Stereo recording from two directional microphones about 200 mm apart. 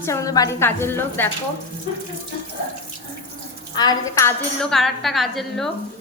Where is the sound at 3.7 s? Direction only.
20° left (ahead or behind).